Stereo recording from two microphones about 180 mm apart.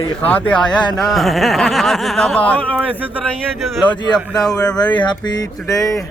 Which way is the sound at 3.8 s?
25° left (ahead or behind).